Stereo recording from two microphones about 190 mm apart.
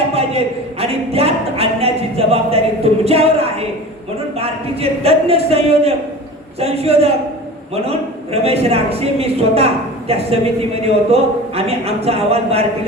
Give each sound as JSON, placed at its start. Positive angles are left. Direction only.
{"t": 0.1, "sound": "speech", "side_deg": -30}